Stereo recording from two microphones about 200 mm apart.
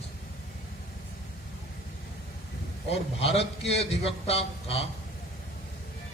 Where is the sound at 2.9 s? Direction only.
30° left (ahead or behind).